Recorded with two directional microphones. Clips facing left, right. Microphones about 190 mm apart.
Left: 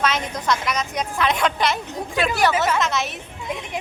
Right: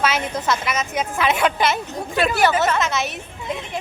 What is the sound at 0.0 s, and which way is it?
A woman's voice, 5° right (ahead or behind).